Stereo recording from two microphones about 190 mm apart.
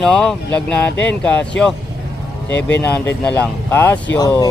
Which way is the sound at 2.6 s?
10° left (ahead or behind).